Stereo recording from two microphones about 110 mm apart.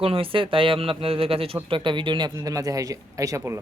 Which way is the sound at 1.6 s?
50° right (ahead or behind).